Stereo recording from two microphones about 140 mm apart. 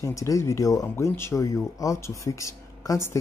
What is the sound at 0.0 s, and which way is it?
Speech, 20° left (ahead or behind).